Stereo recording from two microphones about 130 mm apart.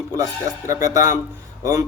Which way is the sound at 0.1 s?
25° right (ahead or behind).